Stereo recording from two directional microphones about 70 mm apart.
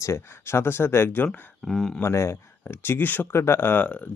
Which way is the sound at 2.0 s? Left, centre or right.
Left.